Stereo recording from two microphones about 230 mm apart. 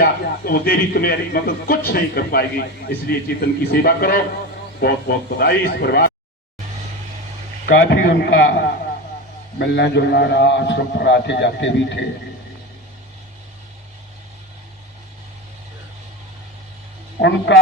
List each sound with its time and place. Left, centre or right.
0.0 s a man's voice: left
7.7 s a man's voice: left
17.2 s a man's voice: left